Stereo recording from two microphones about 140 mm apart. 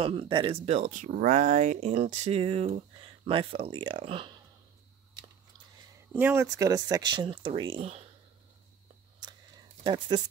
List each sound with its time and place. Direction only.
0.0 s speech: 40° right (ahead or behind)
0.7 s speech: 60° right (ahead or behind); by 4.3 s 40° right (ahead or behind)
6.1 s speech: 15° right (ahead or behind); by 8.0 s 40° right (ahead or behind)
9.2 s a sound: 30° right (ahead or behind)